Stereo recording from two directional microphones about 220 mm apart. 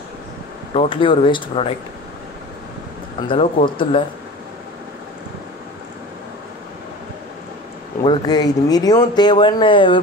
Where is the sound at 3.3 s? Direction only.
25° left (ahead or behind).